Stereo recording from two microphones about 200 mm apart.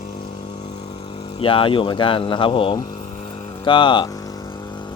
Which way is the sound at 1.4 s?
25° left (ahead or behind).